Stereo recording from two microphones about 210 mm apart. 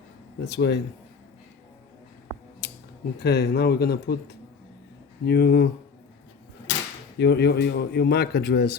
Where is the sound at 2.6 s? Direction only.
50° left (ahead or behind).